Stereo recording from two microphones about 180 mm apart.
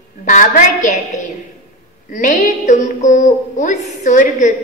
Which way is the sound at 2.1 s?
45° left (ahead or behind).